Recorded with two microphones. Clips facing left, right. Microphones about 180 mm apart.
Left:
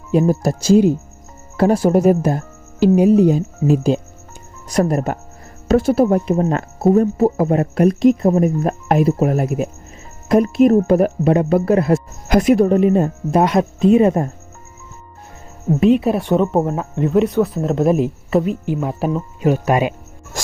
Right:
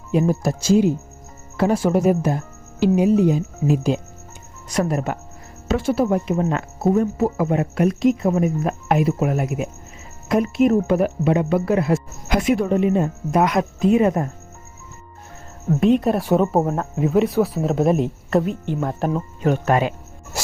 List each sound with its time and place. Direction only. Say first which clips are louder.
0.1 s speech: left 4 dB; 35° left (ahead or behind)
15.8 s speech: left 3 dB; centre (ahead or behind)